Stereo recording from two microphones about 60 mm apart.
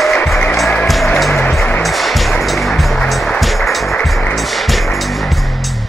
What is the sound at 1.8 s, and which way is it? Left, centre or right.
Music, centre.